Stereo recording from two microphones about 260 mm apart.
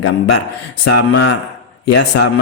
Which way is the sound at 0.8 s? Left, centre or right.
Left.